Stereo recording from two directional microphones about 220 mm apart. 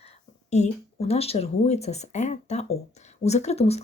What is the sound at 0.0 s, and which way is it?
Speech, 30° left (ahead or behind).